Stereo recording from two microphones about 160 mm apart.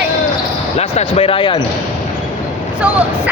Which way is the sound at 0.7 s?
35° left (ahead or behind).